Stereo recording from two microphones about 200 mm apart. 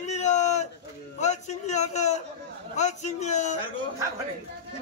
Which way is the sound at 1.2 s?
35° left (ahead or behind).